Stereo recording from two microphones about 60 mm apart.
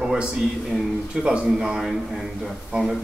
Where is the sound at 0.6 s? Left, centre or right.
Centre.